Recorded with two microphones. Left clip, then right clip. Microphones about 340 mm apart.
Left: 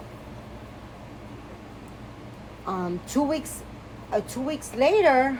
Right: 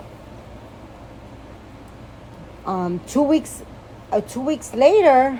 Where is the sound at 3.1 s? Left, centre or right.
Right.